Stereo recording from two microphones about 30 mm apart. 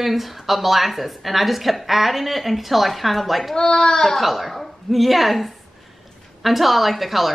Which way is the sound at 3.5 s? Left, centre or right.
Left.